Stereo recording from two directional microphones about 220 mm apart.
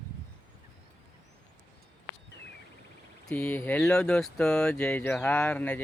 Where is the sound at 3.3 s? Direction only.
5° left (ahead or behind).